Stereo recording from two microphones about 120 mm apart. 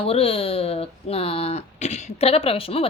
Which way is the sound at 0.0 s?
50° left (ahead or behind).